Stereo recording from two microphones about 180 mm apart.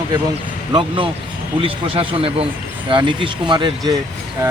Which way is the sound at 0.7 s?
30° right (ahead or behind).